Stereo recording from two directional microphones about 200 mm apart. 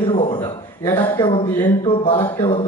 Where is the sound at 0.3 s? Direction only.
20° left (ahead or behind).